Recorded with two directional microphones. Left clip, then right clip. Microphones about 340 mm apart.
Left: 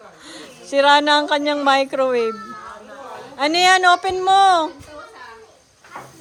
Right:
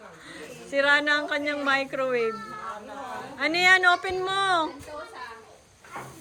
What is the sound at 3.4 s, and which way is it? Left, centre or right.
Speech, centre.